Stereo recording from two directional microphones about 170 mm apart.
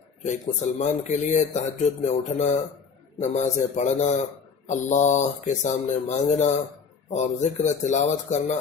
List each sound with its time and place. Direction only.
0.2 s speech: 45° left (ahead or behind)